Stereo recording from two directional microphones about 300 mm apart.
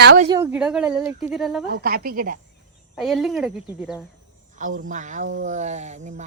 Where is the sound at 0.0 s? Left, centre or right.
Right.